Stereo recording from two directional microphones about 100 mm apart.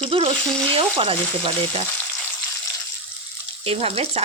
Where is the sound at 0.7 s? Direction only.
65° right (ahead or behind).